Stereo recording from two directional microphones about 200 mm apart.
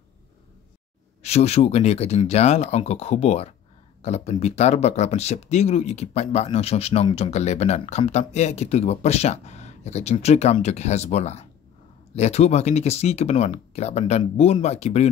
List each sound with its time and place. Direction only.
1.2 s speech: 30° left (ahead or behind)